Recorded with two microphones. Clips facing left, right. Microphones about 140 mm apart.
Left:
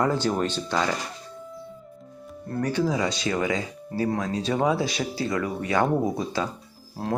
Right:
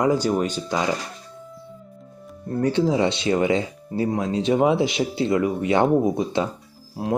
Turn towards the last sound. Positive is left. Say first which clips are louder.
# right 4 dB
turn(degrees=-15)  # may be behind; listen again after turning